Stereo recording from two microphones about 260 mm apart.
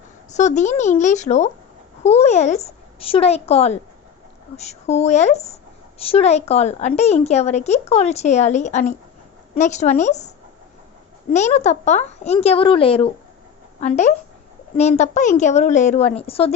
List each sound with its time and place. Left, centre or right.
0.3 s speech: left
11.3 s speech: left